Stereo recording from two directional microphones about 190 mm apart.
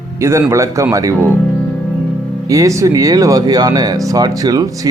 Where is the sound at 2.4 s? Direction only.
15° right (ahead or behind).